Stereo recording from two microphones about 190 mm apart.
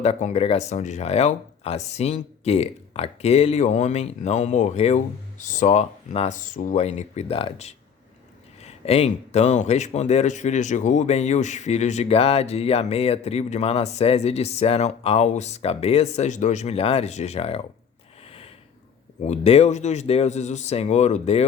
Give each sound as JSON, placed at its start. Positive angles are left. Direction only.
{"t": 0.0, "sound": "a man's voice", "side_deg": 35}
{"t": 18.3, "sound": "a sound", "side_deg": 30}
{"t": 19.2, "sound": "a man's voice", "side_deg": 35}